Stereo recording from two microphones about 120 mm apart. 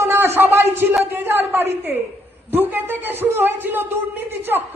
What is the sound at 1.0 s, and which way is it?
A man's voice, 20° right (ahead or behind).